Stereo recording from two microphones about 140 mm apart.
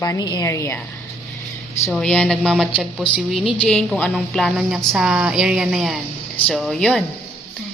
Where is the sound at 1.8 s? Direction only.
5° left (ahead or behind).